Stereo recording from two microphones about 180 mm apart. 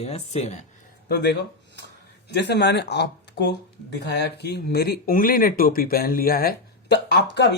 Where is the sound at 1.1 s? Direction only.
70° left (ahead or behind).